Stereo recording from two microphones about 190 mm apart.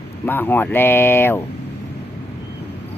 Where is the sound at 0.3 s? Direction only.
10° left (ahead or behind).